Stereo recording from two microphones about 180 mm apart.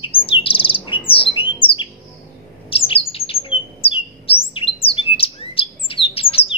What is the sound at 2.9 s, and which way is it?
Bird, 30° left (ahead or behind).